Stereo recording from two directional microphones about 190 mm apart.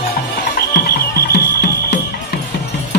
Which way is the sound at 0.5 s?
55° left (ahead or behind).